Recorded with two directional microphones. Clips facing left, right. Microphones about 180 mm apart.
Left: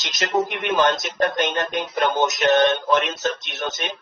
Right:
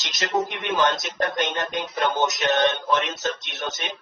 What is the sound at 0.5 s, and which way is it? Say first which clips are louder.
Music: left 3 dB; 55° left (ahead or behind).